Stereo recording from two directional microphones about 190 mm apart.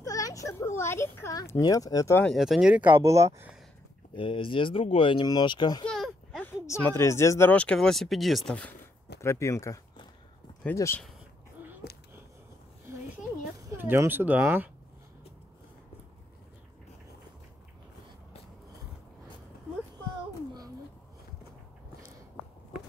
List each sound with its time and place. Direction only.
0.0 s speech: 20° left (ahead or behind)
2.2 s speech: centre (ahead or behind)
4.1 s speech: 25° left (ahead or behind)
5.9 s a sound: centre (ahead or behind)
6.5 s speech: 15° left (ahead or behind)
13.7 s speech: 15° right (ahead or behind)